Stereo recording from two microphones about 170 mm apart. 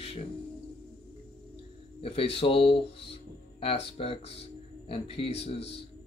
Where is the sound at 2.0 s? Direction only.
35° left (ahead or behind).